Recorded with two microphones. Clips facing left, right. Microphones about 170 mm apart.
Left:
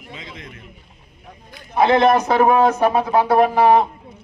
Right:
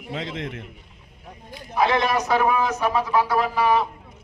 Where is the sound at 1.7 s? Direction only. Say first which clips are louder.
Left 7 dB; 55° left (ahead or behind).